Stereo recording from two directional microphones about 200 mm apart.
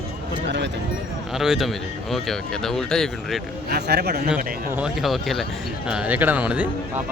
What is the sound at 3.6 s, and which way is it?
Speech, 55° right (ahead or behind).